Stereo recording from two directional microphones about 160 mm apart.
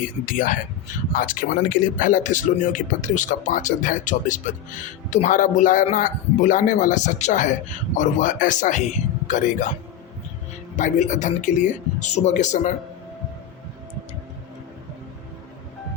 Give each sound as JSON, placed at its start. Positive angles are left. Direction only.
{"t": 0.3, "sound": "speech", "side_deg": 55}
{"t": 10.8, "sound": "speech", "side_deg": 50}